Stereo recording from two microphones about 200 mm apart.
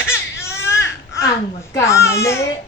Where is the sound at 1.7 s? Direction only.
15° left (ahead or behind).